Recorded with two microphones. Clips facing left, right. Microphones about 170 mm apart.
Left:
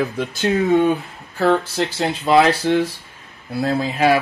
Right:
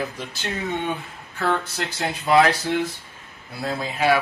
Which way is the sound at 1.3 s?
30° left (ahead or behind).